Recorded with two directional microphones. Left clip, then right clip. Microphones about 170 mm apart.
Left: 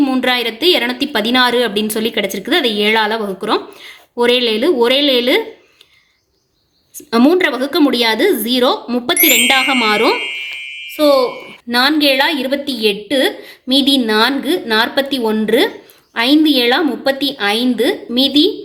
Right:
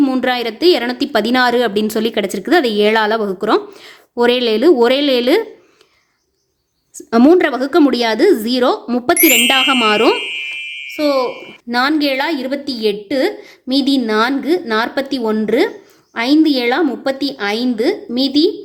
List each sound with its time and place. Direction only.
0.0 s a woman's voice: 35° right (ahead or behind)
6.9 s a woman's voice: 35° right (ahead or behind)
11.7 s a woman's voice: 25° right (ahead or behind)